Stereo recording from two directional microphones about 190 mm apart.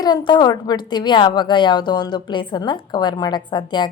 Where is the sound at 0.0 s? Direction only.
20° left (ahead or behind).